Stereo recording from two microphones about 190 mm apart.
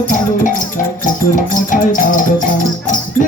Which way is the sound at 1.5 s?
45° left (ahead or behind).